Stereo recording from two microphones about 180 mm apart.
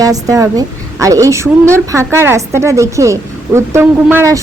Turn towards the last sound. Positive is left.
turn(degrees=-15)  # may be behind; listen again after turning